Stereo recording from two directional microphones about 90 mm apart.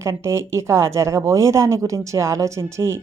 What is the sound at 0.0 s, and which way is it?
Speech, 30° right (ahead or behind).